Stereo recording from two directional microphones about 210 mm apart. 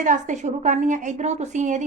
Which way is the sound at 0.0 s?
35° right (ahead or behind).